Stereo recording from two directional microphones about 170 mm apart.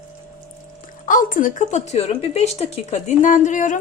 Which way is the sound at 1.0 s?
50° left (ahead or behind).